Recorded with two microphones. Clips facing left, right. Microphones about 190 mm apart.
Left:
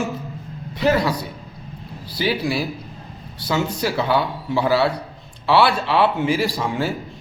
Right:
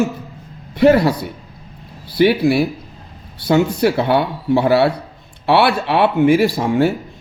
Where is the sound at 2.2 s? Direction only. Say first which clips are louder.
Right 9 dB; 60° right (ahead or behind).